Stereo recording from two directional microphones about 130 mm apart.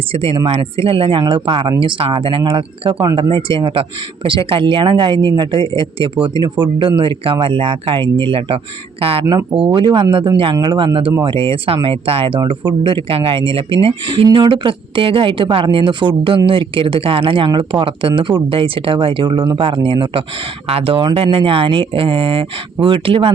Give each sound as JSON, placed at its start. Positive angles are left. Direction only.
{"t": 0.1, "sound": "speech", "side_deg": -45}
{"t": 9.2, "sound": "speech", "side_deg": -25}
{"t": 9.7, "sound": "speech", "side_deg": -40}